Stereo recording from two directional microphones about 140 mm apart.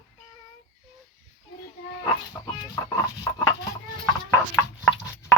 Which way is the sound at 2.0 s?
25° left (ahead or behind).